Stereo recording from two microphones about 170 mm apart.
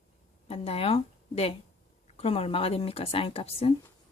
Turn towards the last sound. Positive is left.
turn(degrees=35)  # may be behind; listen again after turning